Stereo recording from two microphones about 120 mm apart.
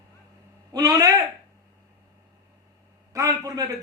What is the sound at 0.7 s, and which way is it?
Speech, 30° right (ahead or behind).